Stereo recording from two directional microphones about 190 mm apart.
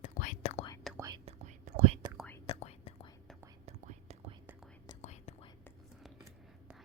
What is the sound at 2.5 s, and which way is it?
Whispering, 35° left (ahead or behind).